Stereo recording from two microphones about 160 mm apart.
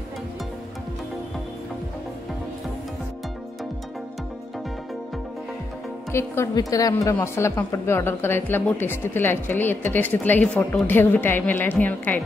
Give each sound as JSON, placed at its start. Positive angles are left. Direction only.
{"t": 6.1, "sound": "a woman's voice", "side_deg": 15}